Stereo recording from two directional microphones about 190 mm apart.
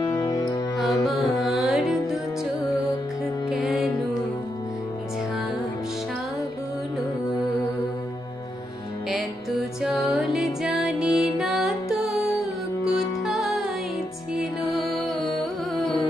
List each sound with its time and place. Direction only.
0.0 s music: 20° left (ahead or behind)
0.7 s music: centre (ahead or behind)
3.4 s music: centre (ahead or behind)
9.1 s music: centre (ahead or behind)
15.3 s carnatic music: centre (ahead or behind)